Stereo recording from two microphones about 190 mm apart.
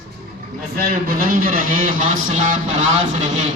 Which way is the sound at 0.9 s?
50° right (ahead or behind).